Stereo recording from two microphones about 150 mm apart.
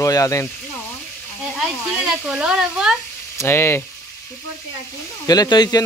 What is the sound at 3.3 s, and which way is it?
Speech, 15° left (ahead or behind).